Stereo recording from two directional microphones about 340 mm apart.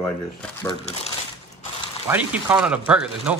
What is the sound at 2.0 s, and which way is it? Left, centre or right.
Speech, centre.